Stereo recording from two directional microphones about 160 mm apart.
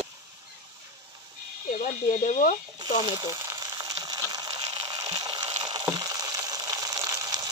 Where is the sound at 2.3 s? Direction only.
50° left (ahead or behind).